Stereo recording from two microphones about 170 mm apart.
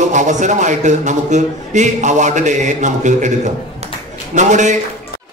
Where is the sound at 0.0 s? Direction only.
45° right (ahead or behind).